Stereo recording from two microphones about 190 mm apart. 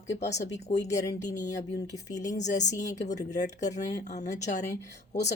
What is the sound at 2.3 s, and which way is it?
Speech, 40° left (ahead or behind).